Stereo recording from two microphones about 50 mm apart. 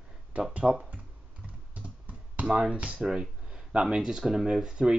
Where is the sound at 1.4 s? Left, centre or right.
Right.